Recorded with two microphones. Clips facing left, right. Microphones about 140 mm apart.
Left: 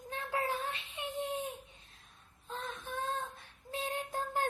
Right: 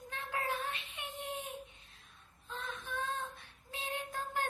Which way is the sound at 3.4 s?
45° left (ahead or behind).